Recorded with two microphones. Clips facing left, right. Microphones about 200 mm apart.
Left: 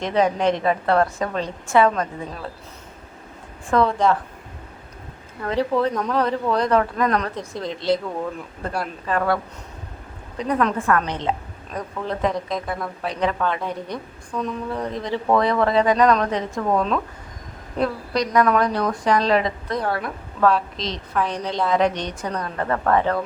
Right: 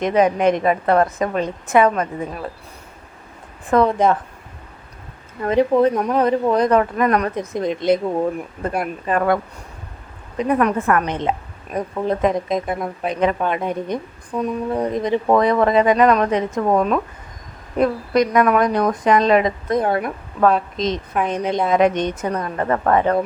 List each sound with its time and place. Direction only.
0.0 s speech: 15° right (ahead or behind)
3.7 s a woman's voice: 20° right (ahead or behind)
5.4 s speech: 15° right (ahead or behind)
7.9 s a woman's voice: 30° right (ahead or behind)
8.4 s speech: 20° right (ahead or behind)
10.5 s a woman's voice: 10° right (ahead or behind)
20.7 s a woman's voice: 50° right (ahead or behind)
21.1 s a woman's voice: 20° right (ahead or behind)